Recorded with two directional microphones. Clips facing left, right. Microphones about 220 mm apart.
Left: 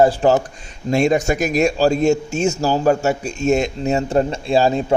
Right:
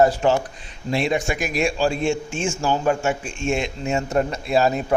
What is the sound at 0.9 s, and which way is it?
A man's voice, 45° left (ahead or behind).